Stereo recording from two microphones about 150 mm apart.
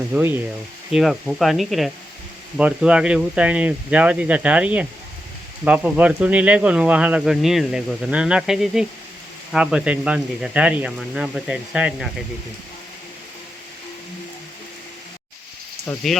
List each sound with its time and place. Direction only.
0.1 s speech: 15° right (ahead or behind)
0.9 s speech: centre (ahead or behind)
15.9 s speech: 10° left (ahead or behind)